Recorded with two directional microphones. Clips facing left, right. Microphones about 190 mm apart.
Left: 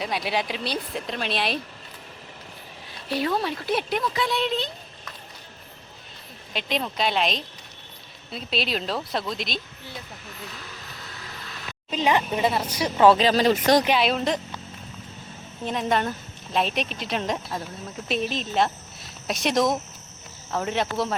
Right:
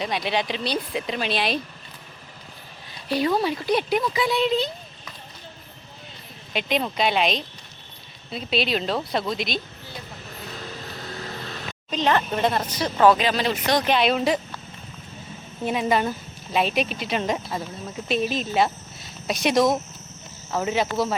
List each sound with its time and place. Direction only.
0.0 s speech: 5° left (ahead or behind)
3.1 s speech: centre (ahead or behind)
6.5 s speech: centre (ahead or behind)
11.9 s speech: 10° left (ahead or behind)
13.1 s speech: 35° left (ahead or behind)
13.8 s speech: 5° left (ahead or behind)
15.6 s speech: 5° right (ahead or behind)